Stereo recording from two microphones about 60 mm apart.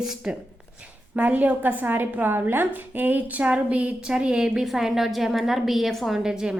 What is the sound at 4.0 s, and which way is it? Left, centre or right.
A woman's voice, centre.